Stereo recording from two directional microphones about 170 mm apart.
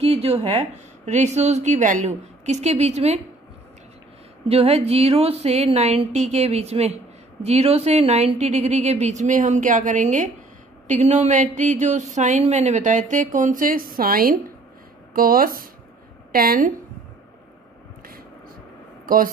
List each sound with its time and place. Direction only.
0.0 s a woman's voice: 35° right (ahead or behind)
4.5 s a woman's voice: 35° right (ahead or behind); by 16.7 s 60° right (ahead or behind)
19.0 s a woman's voice: 55° right (ahead or behind)